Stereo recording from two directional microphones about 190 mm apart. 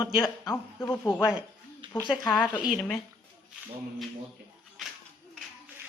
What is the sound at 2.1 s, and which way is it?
Speech, 25° left (ahead or behind).